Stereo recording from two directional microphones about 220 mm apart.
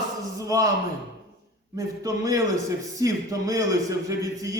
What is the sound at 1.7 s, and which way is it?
A man's voice, 15° right (ahead or behind).